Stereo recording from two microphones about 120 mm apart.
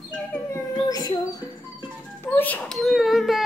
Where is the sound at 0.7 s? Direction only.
30° left (ahead or behind).